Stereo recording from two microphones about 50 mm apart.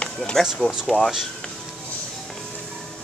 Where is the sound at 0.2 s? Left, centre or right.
Centre.